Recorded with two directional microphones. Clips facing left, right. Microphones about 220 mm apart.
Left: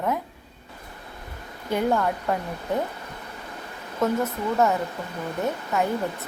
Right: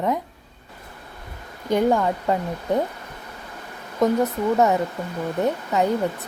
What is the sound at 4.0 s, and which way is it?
A woman's voice, 15° right (ahead or behind).